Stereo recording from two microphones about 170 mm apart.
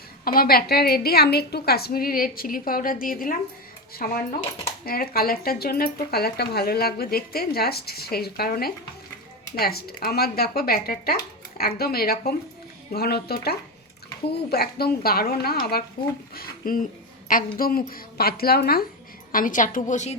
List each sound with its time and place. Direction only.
0.3 s speech: 60° left (ahead or behind)
19.3 s a woman's voice: 55° left (ahead or behind)